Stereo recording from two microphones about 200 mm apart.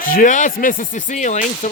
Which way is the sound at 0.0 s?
45° left (ahead or behind).